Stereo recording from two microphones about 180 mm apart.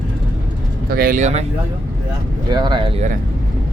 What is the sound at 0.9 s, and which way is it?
Speech, 50° right (ahead or behind).